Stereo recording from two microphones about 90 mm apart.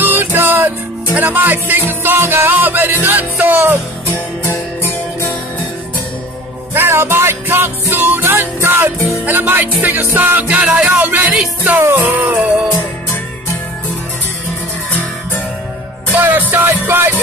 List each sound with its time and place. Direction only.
0.0 s music: 25° right (ahead or behind)
4.1 s music: 25° left (ahead or behind)
6.7 s music: 25° right (ahead or behind)
16.2 s music: 20° right (ahead or behind)